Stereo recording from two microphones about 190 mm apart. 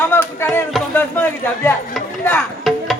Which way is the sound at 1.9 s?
5° left (ahead or behind).